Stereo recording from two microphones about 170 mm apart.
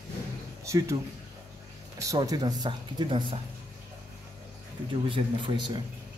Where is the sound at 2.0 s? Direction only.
20° right (ahead or behind).